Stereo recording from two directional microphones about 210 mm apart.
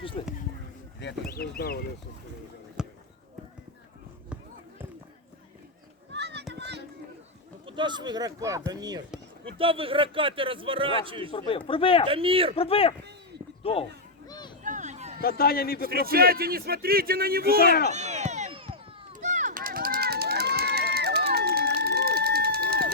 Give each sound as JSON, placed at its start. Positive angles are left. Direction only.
{"t": 0.0, "sound": "speech", "side_deg": 25}
{"t": 1.3, "sound": "a man's voice", "side_deg": 45}
{"t": 2.8, "sound": "basketball bounce", "side_deg": -5}
{"t": 6.1, "sound": "children playing", "side_deg": -55}
{"t": 7.7, "sound": "a man's voice", "side_deg": -20}
{"t": 11.3, "sound": "speech", "side_deg": 25}
{"t": 12.0, "sound": "a man's voice", "side_deg": -25}
{"t": 12.5, "sound": "speech", "side_deg": 25}
{"t": 14.3, "sound": "a sound", "side_deg": 20}
{"t": 14.6, "sound": "a sound", "side_deg": -35}
{"t": 15.2, "sound": "a man's voice", "side_deg": 45}
{"t": 15.9, "sound": "speech", "side_deg": -45}
{"t": 17.9, "sound": "a sound", "side_deg": -35}
{"t": 19.2, "sound": "run", "side_deg": -35}